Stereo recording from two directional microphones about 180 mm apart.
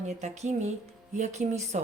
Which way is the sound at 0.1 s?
40° right (ahead or behind).